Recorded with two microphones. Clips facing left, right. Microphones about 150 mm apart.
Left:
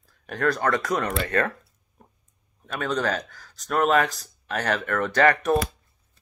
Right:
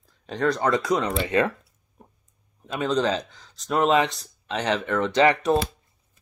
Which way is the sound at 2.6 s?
25° right (ahead or behind).